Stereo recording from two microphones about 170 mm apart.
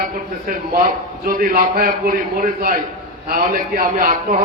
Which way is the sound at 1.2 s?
55° right (ahead or behind).